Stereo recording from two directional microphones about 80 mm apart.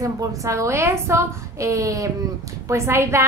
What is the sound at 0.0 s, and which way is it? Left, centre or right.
A woman's voice, right.